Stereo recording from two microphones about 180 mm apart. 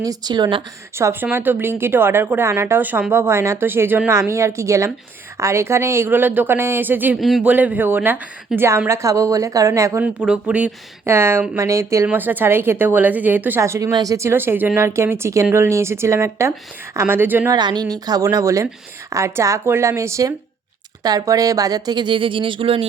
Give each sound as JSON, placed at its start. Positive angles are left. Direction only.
{"t": 0.0, "sound": "speech", "side_deg": -20}
{"t": 0.9, "sound": "speech", "side_deg": -15}
{"t": 10.2, "sound": "speech", "side_deg": -5}
{"t": 17.5, "sound": "speech", "side_deg": -25}